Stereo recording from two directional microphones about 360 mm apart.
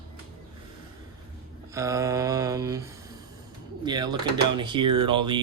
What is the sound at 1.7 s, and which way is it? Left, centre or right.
Speech, centre.